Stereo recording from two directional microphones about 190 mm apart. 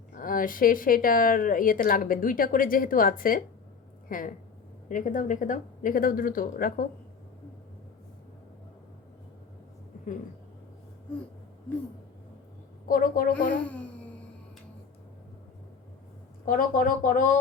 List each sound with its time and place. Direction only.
0.2 s speech: 45° left (ahead or behind)
12.9 s speech: 50° left (ahead or behind)
13.7 s a sound: 5° left (ahead or behind)
16.5 s speech: 45° left (ahead or behind)